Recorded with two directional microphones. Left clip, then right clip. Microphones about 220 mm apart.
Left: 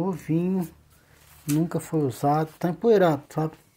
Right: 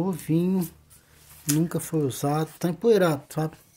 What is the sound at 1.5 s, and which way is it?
Speech, 5° right (ahead or behind).